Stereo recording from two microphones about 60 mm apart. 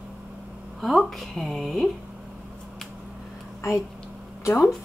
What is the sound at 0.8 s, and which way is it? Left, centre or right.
Speech, centre.